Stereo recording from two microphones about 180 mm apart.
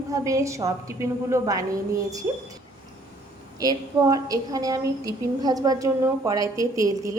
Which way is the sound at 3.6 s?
20° right (ahead or behind).